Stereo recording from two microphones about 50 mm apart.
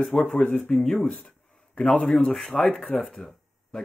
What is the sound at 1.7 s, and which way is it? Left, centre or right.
A man's voice, centre.